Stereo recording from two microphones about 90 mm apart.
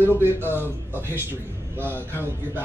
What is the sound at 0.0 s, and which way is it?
Speech, 25° right (ahead or behind).